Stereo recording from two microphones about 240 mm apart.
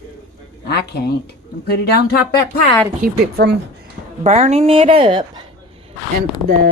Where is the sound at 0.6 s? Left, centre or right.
Left.